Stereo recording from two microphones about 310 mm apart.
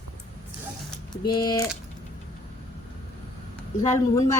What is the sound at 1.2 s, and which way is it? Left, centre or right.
Speech, centre.